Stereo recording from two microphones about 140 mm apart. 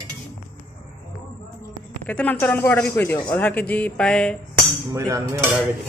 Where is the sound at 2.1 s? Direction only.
10° left (ahead or behind).